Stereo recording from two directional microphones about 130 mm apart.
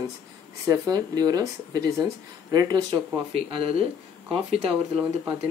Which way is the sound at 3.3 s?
45° right (ahead or behind).